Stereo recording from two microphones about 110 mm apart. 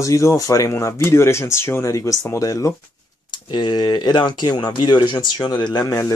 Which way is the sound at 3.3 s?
45° left (ahead or behind).